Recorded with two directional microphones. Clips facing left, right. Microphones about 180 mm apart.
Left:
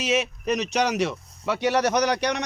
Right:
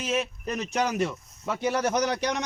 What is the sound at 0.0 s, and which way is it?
Speech, 80° left.